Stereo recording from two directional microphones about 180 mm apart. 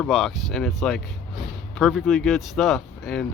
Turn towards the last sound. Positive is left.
turn(degrees=0)  # may be behind; listen again after turning